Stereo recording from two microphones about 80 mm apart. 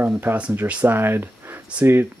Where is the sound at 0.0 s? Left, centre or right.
Right.